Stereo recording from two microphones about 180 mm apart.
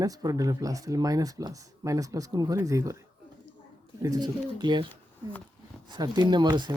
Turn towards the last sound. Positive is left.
turn(degrees=-25)  # may be behind; listen again after turning